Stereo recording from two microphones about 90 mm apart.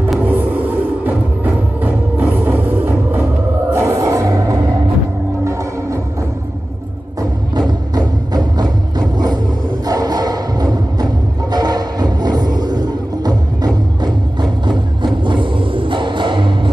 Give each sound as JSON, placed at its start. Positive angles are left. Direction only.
{"t": 0.3, "sound": "music", "side_deg": -20}
{"t": 3.7, "sound": "a sound", "side_deg": -30}
{"t": 7.5, "sound": "music", "side_deg": -50}
{"t": 9.8, "sound": "music", "side_deg": -45}
{"t": 15.2, "sound": "music", "side_deg": -65}